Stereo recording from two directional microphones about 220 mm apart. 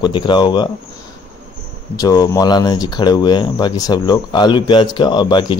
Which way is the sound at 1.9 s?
15° left (ahead or behind).